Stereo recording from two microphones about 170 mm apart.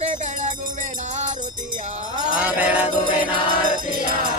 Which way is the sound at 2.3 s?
10° right (ahead or behind).